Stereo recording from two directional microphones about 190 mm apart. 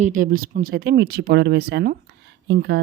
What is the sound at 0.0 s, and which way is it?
Speech, 45° right (ahead or behind).